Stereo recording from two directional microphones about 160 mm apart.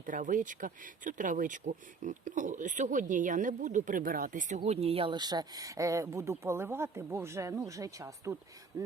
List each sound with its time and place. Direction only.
0.0 s speech: 55° right (ahead or behind); by 8.4 s 20° right (ahead or behind)